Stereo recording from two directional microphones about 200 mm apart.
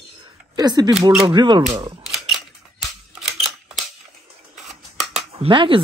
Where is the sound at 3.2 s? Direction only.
Centre (ahead or behind).